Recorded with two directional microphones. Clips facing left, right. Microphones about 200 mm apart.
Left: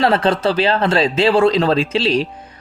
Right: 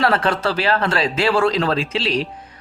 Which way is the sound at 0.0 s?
20° left (ahead or behind).